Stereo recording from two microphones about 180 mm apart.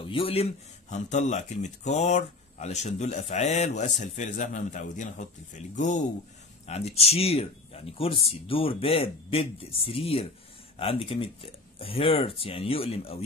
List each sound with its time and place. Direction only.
0.0 s a man's voice: 30° left (ahead or behind)